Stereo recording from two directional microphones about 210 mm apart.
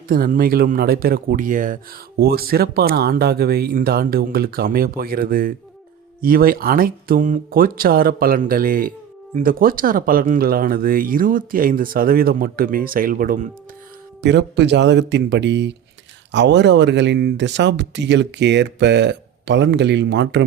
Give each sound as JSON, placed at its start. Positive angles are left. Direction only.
{"t": 0.1, "sound": "speech", "side_deg": -45}
{"t": 14.2, "sound": "speech", "side_deg": -55}